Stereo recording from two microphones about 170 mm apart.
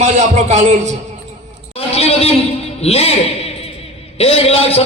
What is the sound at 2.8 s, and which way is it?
A man's voice, 35° left (ahead or behind).